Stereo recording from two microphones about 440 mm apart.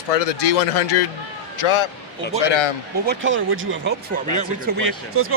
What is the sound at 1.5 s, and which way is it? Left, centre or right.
Speech, left.